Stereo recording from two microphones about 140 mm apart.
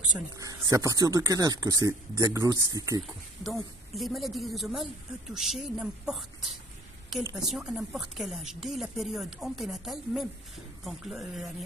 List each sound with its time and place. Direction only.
0.4 s speech: 25° right (ahead or behind)
3.0 s speech: centre (ahead or behind)